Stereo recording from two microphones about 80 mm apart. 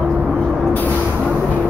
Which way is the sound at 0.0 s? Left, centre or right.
Centre.